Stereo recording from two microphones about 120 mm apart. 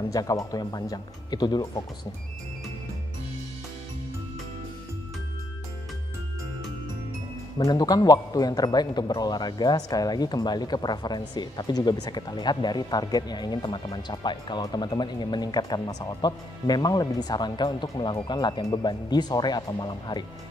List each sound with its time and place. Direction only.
0.1 s a man's voice: 30° left (ahead or behind)
7.5 s a man's voice: 35° left (ahead or behind)